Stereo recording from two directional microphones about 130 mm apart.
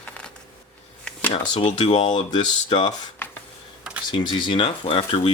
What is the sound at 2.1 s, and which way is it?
Speech, 35° left (ahead or behind).